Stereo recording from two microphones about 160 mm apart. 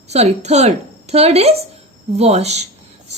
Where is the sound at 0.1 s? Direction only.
45° right (ahead or behind).